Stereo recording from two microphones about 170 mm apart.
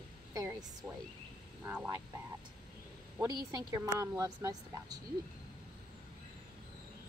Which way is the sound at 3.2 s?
25° right (ahead or behind).